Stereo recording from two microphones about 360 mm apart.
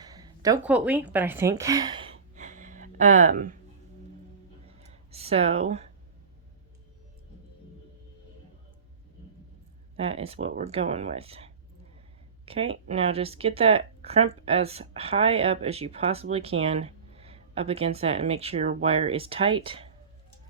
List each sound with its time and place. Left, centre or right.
0.0 s a woman's voice: centre
2.3 s gasp: centre
4.9 s a sound: centre
10.0 s speech: centre